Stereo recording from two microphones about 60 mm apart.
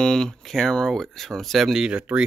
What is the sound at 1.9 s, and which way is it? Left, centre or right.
Speech, right.